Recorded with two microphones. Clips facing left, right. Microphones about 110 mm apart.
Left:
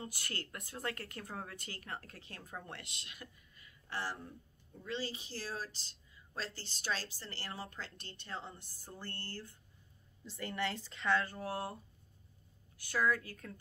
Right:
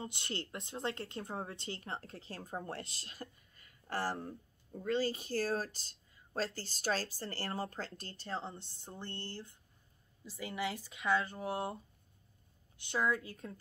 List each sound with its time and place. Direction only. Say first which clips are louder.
0.0 s a woman's voice: right 3 dB; 25° right (ahead or behind)
10.2 s speech: even; 10° right (ahead or behind)